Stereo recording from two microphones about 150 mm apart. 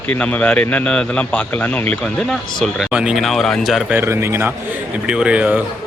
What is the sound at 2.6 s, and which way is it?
Speech, 5° right (ahead or behind).